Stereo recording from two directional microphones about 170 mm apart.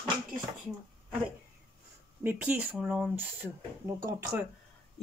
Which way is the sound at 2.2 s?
10° right (ahead or behind).